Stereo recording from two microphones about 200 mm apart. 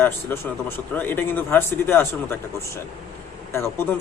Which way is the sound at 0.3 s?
10° left (ahead or behind).